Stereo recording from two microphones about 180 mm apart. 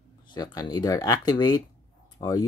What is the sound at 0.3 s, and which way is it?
Speech, 20° left (ahead or behind).